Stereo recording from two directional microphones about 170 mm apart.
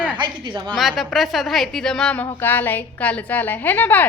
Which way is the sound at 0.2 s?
25° right (ahead or behind).